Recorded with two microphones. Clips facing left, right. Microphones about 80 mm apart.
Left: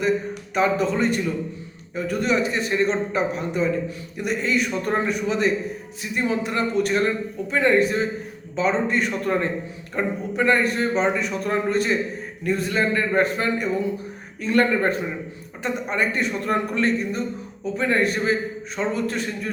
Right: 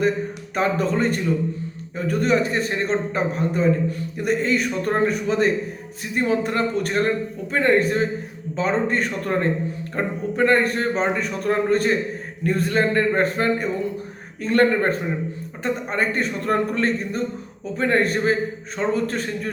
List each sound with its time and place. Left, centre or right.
0.5 s a man's voice: right